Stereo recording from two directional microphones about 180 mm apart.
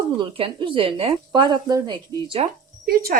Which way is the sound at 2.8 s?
55° right (ahead or behind).